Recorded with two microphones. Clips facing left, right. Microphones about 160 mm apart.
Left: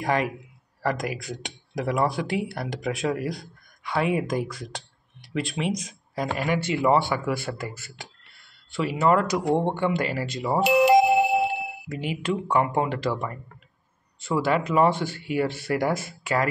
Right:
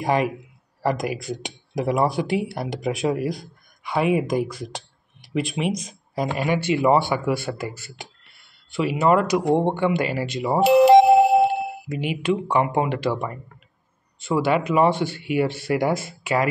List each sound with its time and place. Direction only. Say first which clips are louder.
0.0 s speech: right 3 dB; 15° right (ahead or behind)
10.6 s doorbell: right 5 dB; 30° right (ahead or behind)
11.9 s speech: right 4 dB; 15° right (ahead or behind)
14.7 s speech: right 2 dB; 20° right (ahead or behind)